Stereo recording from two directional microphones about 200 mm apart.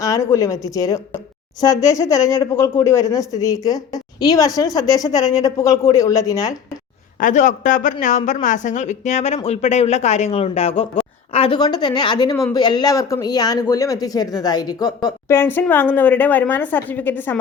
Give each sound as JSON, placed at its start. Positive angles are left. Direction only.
{"t": 0.0, "sound": "speech", "side_deg": 15}
{"t": 7.2, "sound": "a woman's voice", "side_deg": 40}